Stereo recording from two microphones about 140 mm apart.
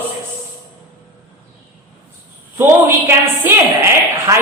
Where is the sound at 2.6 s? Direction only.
15° right (ahead or behind).